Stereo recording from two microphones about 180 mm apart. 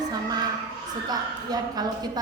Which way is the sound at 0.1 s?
20° right (ahead or behind).